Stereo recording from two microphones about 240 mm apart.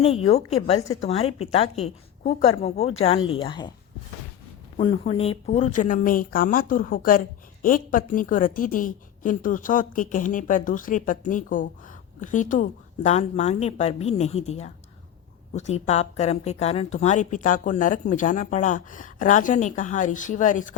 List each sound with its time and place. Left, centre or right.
0.0 s a woman's voice: left
4.8 s a woman's voice: left